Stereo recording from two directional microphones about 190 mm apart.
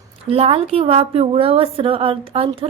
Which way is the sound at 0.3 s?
30° right (ahead or behind).